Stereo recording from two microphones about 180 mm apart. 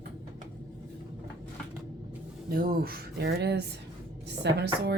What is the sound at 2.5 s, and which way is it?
A woman's voice, 55° right (ahead or behind).